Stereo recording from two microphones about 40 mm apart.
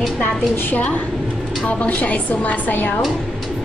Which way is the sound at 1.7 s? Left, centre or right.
Left.